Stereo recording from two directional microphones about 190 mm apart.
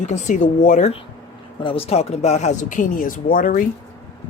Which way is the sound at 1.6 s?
30° left (ahead or behind).